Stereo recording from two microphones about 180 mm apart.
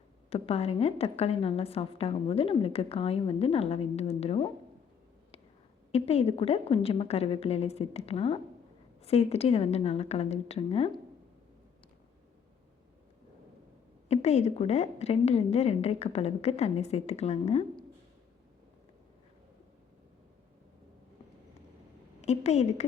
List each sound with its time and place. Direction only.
0.3 s a woman's voice: 35° left (ahead or behind)
5.9 s a woman's voice: 35° left (ahead or behind)
14.1 s a woman's voice: 35° left (ahead or behind)
22.2 s a woman's voice: 40° left (ahead or behind)